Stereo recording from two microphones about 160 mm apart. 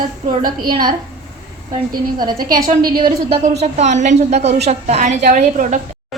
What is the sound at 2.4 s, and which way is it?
Speech, 60° right (ahead or behind).